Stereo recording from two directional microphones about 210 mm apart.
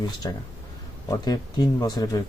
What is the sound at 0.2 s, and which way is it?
Speech, 20° left (ahead or behind).